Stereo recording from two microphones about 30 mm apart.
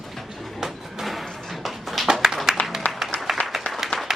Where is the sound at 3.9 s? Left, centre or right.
Centre.